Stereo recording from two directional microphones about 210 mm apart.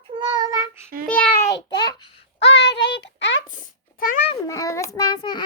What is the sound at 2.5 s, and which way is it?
Child singing, 55° left (ahead or behind).